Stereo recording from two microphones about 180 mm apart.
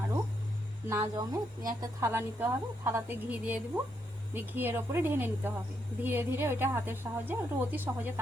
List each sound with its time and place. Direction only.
0.9 s a woman's voice: 20° right (ahead or behind)